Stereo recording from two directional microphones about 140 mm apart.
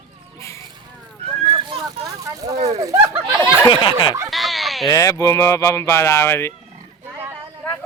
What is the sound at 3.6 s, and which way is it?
Speech, 35° left (ahead or behind).